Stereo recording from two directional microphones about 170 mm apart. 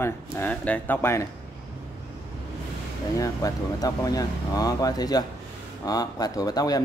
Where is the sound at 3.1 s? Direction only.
20° left (ahead or behind).